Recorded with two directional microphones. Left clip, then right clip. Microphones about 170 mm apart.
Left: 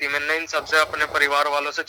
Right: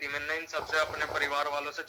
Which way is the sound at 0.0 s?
45° left (ahead or behind).